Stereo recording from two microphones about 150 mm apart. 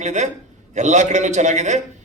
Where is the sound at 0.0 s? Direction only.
50° right (ahead or behind).